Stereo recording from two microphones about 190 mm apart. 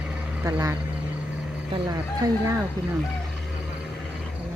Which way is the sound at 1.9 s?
20° right (ahead or behind).